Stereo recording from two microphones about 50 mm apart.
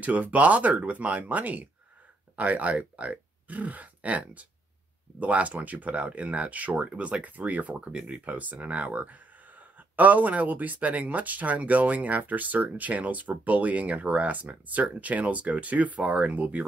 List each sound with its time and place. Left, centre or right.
0.0 s speech: right
7.7 s speech: right